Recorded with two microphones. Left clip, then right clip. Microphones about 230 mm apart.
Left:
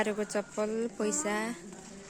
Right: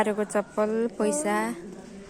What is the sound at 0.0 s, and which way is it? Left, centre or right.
A woman's voice, centre.